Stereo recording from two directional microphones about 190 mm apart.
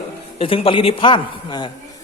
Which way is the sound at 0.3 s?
30° left (ahead or behind).